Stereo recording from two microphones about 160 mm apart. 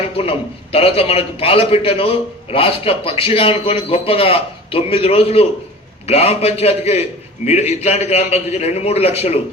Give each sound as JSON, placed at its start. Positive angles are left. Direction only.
{"t": 0.2, "sound": "a man's voice", "side_deg": 35}